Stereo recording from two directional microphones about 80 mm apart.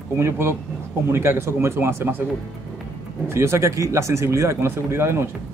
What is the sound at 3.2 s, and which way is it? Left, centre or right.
A man's voice, right.